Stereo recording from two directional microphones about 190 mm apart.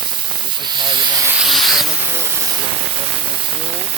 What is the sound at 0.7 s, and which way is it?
Hiss, 25° right (ahead or behind).